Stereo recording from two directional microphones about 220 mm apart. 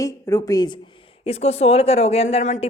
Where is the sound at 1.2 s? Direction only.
30° left (ahead or behind).